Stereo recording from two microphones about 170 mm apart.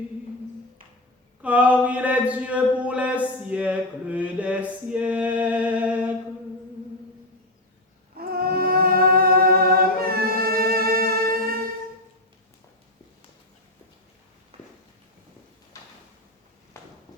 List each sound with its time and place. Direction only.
1.4 s speech: 10° right (ahead or behind)
8.1 s music: 60° right (ahead or behind)